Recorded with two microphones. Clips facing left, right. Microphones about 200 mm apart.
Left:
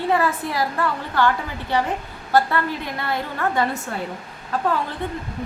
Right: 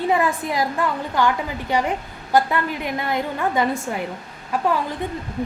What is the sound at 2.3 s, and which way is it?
A woman's voice, 15° right (ahead or behind).